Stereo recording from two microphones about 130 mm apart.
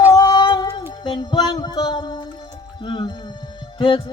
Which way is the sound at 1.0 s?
35° left (ahead or behind).